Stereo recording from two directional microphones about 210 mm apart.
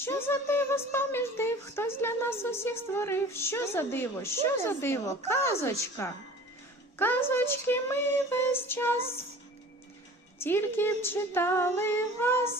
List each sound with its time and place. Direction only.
0.0 s speech: 10° left (ahead or behind)
7.0 s speech: 10° left (ahead or behind)
10.3 s speech: 10° left (ahead or behind)